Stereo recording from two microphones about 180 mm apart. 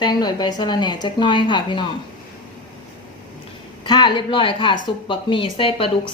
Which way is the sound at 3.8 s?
25° left (ahead or behind).